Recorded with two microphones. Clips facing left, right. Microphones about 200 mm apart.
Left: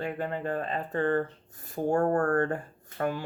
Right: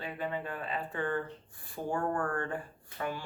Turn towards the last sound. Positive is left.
turn(degrees=45)  # may be behind; listen again after turning